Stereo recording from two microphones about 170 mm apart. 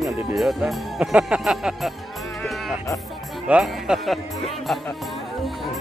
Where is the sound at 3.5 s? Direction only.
5° right (ahead or behind).